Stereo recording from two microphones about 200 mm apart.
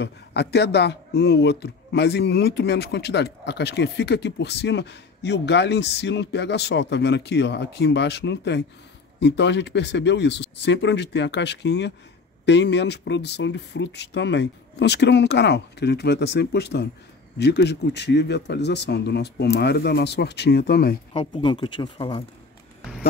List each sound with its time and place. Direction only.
0.0 s speech: 55° left (ahead or behind)
21.1 s speech: 25° left (ahead or behind)